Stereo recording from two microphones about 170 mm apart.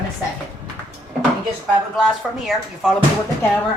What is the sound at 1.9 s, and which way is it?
Speech, centre (ahead or behind).